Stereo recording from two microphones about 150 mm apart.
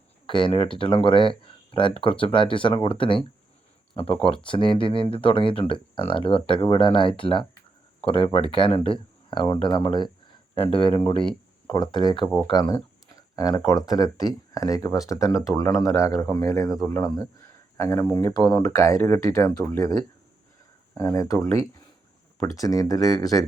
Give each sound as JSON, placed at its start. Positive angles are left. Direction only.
{"t": 0.3, "sound": "speech", "side_deg": 35}
{"t": 12.1, "sound": "speech", "side_deg": 0}
{"t": 12.5, "sound": "a sound", "side_deg": 30}
{"t": 13.7, "sound": "speech", "side_deg": 25}